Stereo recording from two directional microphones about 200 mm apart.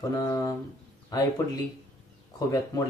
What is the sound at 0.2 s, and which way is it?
Speech, 20° left (ahead or behind).